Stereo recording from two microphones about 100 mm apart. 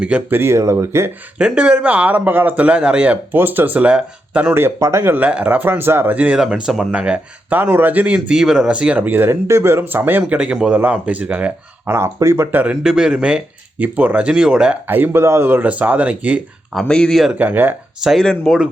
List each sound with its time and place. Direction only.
0.0 s speech: 15° right (ahead or behind)
1.4 s speech: 10° right (ahead or behind)
4.5 s speech: 25° right (ahead or behind)
11.9 s speech: 30° right (ahead or behind)
12.5 s speech: 15° right (ahead or behind)
14.8 s speech: 20° right (ahead or behind)
16.9 s speech: 5° left (ahead or behind)
17.3 s speech: 15° right (ahead or behind)
18.0 s speech: centre (ahead or behind)